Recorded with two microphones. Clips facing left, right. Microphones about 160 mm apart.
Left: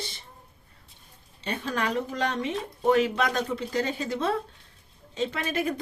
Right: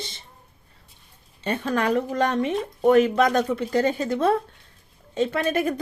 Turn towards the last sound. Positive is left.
turn(degrees=-50)  # may be behind; listen again after turning